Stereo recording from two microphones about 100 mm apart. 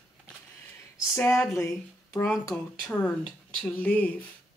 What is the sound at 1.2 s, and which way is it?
Speech, 30° left (ahead or behind).